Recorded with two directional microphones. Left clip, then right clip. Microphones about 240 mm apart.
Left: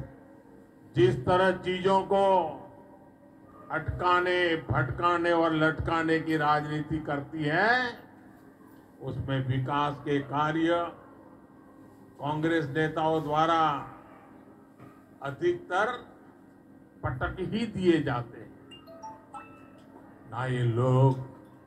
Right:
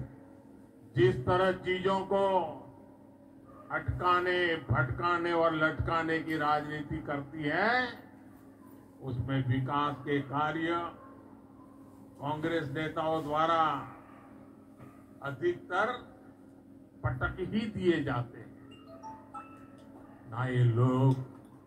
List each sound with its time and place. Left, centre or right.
0.9 s a man's voice: left
3.6 s a man's voice: left
9.0 s a man's voice: left
12.2 s a man's voice: left
15.2 s a man's voice: left
17.0 s a man's voice: left
20.2 s a man's voice: left